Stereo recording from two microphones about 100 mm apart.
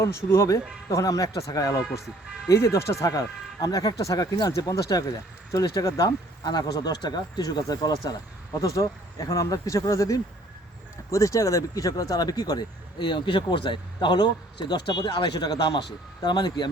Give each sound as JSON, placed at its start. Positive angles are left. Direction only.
{"t": 0.0, "sound": "speech", "side_deg": 25}